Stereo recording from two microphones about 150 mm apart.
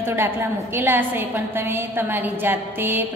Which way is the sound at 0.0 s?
15° right (ahead or behind).